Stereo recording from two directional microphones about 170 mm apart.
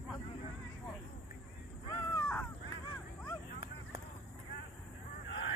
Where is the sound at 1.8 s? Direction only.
15° left (ahead or behind).